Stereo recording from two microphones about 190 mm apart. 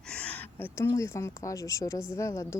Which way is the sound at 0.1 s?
5° left (ahead or behind).